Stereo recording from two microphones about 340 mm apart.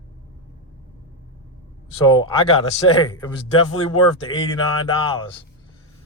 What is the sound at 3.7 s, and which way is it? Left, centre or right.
Speech, left.